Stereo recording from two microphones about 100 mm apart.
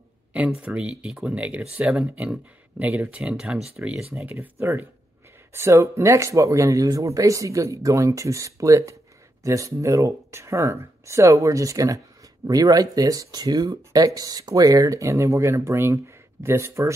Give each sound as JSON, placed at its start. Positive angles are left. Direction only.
{"t": 0.3, "sound": "speech", "side_deg": -10}
{"t": 4.2, "sound": "speech", "side_deg": -20}